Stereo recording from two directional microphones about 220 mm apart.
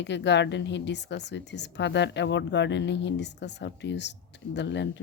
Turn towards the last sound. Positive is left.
turn(degrees=50)  # may be behind; listen again after turning